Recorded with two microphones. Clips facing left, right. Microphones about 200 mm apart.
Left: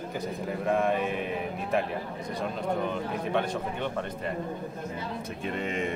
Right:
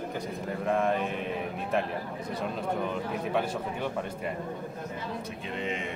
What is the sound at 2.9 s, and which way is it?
Speech, 5° right (ahead or behind).